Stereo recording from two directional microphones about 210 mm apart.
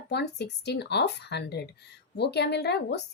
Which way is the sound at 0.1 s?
55° left (ahead or behind).